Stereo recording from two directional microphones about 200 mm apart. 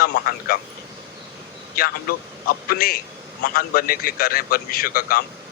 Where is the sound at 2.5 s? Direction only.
45° left (ahead or behind).